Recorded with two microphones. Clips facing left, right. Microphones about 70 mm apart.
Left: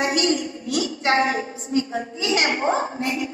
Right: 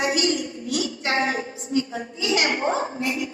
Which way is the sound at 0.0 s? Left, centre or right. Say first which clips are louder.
Left 2 dB; left.